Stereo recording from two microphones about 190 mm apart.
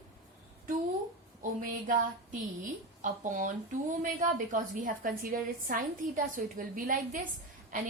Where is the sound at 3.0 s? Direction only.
45° right (ahead or behind).